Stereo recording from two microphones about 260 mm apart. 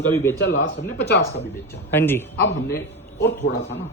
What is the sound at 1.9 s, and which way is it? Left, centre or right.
Speech, centre.